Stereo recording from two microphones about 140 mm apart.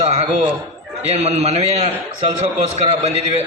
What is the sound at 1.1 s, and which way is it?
A man's voice, 50° right (ahead or behind).